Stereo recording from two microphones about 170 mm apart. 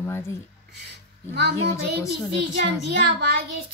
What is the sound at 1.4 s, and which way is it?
A child's voice, 70° right (ahead or behind).